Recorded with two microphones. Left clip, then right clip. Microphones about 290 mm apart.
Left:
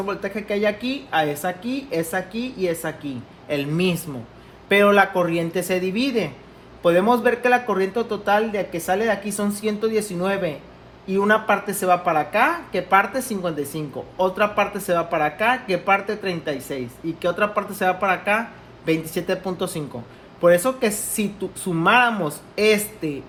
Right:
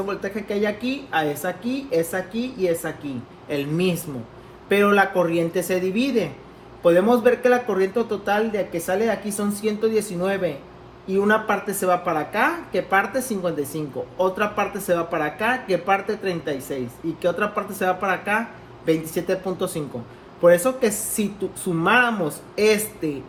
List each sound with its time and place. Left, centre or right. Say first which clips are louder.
0.0 s a woman's voice: left 1 dB; left